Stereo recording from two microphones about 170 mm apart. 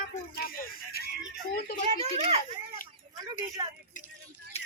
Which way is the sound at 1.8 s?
40° right (ahead or behind).